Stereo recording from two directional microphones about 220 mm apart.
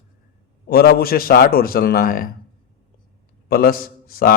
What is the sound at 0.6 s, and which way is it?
Speech, 45° left (ahead or behind).